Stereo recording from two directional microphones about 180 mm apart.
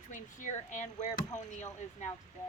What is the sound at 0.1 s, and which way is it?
Speech, 45° left (ahead or behind).